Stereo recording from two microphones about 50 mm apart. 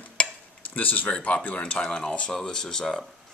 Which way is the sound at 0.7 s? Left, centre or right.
Left.